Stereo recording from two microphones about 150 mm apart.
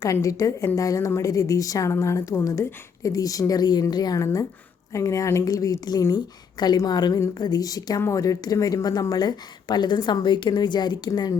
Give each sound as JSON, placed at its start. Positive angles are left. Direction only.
{"t": 0.0, "sound": "a woman's voice", "side_deg": 20}